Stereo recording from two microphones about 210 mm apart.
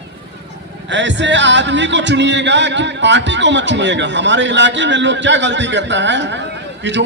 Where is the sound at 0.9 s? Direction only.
60° right (ahead or behind).